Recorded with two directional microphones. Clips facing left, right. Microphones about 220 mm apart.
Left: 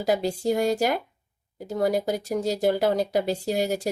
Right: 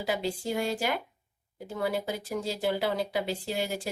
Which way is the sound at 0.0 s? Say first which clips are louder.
Left 7 dB; 40° left (ahead or behind).